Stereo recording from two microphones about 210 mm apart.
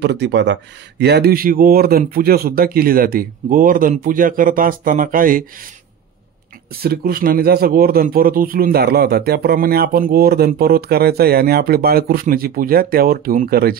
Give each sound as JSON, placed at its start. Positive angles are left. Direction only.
{"t": 0.0, "sound": "speech", "side_deg": -55}
{"t": 6.8, "sound": "speech", "side_deg": -45}